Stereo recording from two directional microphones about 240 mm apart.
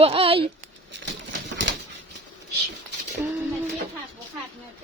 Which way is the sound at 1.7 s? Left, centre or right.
Right.